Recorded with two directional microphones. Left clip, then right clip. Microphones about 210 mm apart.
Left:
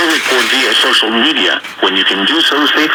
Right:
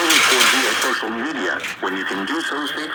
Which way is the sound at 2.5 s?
35° left (ahead or behind).